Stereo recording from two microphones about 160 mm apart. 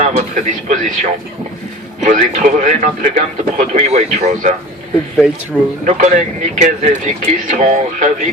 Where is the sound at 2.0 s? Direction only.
50° right (ahead or behind).